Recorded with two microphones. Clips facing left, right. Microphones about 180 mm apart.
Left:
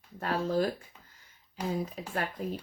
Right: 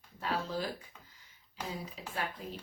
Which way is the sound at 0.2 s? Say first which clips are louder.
Left 7 dB; 50° left (ahead or behind).